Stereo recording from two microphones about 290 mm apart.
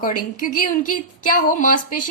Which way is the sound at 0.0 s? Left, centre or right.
Left.